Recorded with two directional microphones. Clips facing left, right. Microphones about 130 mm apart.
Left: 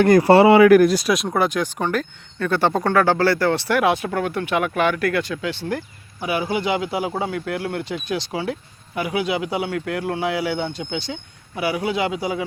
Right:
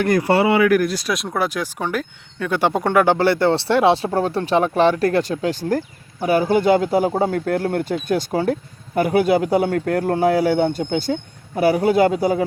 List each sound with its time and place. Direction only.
0.0 s speech: 35° left (ahead or behind)
0.9 s speech: 5° left (ahead or behind); by 12.5 s 45° right (ahead or behind)